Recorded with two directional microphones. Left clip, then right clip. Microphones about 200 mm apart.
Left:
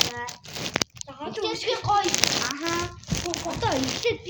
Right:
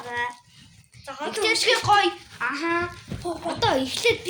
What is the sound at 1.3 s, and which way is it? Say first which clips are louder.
Speech: right 6 dB; 35° right (ahead or behind).